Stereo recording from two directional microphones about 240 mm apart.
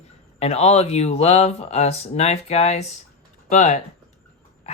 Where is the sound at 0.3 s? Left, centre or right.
Left.